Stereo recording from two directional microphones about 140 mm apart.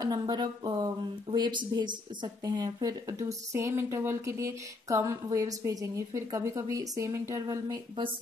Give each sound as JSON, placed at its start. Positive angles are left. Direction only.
{"t": 0.0, "sound": "speech", "side_deg": -30}